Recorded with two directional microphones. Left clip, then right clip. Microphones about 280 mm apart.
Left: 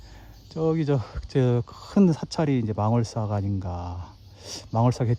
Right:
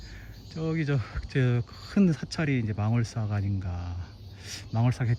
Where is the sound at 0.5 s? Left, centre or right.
Centre.